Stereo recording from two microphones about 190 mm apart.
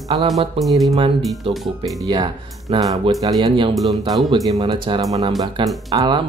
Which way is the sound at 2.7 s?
20° right (ahead or behind).